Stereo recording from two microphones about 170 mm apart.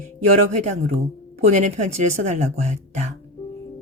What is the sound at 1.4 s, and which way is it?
Speech, 45° right (ahead or behind).